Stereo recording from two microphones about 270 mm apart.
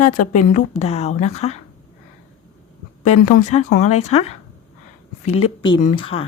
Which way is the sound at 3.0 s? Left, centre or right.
Left.